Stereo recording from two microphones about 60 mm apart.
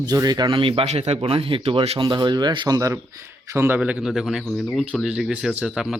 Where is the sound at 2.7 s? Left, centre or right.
Right.